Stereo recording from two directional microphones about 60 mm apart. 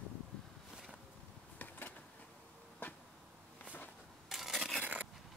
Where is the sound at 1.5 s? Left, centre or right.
Left.